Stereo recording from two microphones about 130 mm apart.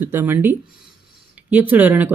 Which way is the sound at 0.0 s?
15° right (ahead or behind).